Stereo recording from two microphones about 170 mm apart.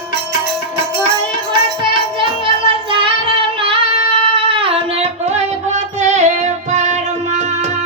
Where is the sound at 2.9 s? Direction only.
30° right (ahead or behind).